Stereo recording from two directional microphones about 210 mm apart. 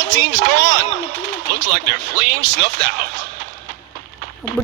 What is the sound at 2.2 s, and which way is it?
Speech, 45° right (ahead or behind).